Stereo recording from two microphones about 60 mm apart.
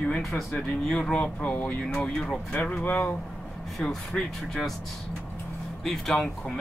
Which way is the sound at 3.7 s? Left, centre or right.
Centre.